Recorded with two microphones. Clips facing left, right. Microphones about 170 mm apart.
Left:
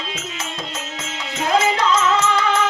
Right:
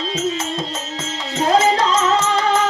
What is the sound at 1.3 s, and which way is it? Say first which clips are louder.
Music: right 3 dB; 35° right (ahead or behind).